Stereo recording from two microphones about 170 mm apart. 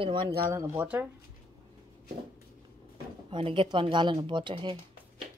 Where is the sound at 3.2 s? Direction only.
30° right (ahead or behind).